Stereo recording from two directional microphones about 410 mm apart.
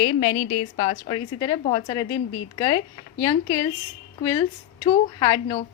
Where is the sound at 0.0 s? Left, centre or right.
Centre.